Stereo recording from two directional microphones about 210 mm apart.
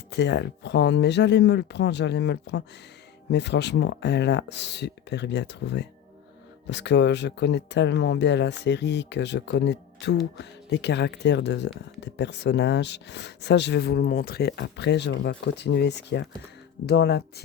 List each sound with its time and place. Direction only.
0.1 s speech: 55° left (ahead or behind)